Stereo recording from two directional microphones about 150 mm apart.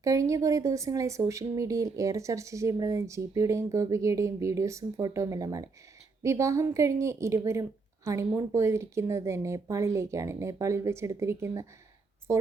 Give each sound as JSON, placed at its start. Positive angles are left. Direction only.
{"t": 0.0, "sound": "a woman's voice", "side_deg": -20}